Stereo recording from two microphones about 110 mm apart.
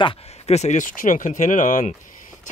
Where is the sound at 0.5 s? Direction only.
80° left.